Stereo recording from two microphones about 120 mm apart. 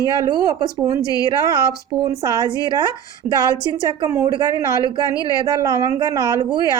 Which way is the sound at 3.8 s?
25° right (ahead or behind).